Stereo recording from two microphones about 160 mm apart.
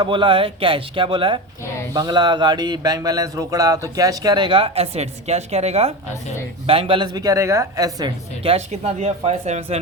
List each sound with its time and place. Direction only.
0.0 s speech: 30° right (ahead or behind)
8.4 s speech: 40° right (ahead or behind)